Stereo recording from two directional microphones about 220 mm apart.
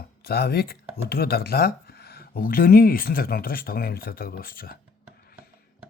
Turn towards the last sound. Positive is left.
turn(degrees=40)  # may be behind; listen again after turning